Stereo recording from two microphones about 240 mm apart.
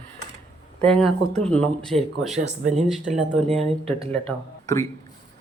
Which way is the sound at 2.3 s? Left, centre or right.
Right.